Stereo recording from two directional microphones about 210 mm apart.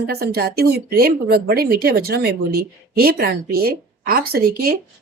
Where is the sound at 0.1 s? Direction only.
50° right (ahead or behind).